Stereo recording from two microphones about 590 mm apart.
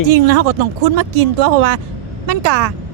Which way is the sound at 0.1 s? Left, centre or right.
Right.